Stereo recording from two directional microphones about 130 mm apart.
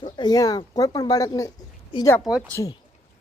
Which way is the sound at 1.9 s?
40° left (ahead or behind).